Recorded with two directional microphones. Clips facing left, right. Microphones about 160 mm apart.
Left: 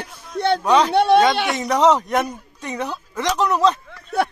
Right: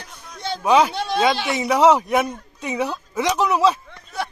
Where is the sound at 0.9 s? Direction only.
65° left (ahead or behind).